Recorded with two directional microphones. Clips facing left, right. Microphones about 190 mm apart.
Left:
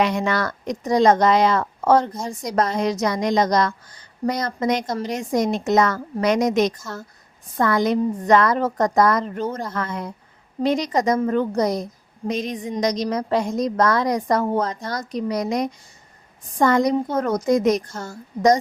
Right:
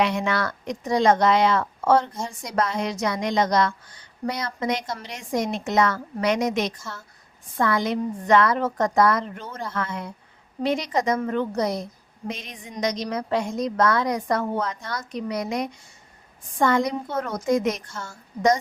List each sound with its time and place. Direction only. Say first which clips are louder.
0.0 s speech: left 2 dB; 40° left (ahead or behind)